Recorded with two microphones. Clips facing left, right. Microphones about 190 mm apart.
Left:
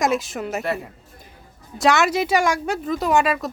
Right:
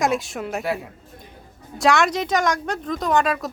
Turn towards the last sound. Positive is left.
turn(degrees=5)  # may be behind; listen again after turning